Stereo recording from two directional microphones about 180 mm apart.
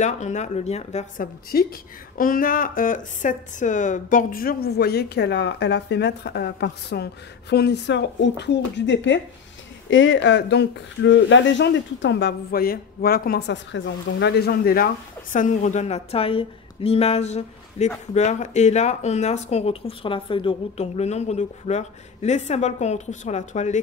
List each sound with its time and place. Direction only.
0.0 s speech: 40° left (ahead or behind)
15.3 s speech: 45° left (ahead or behind)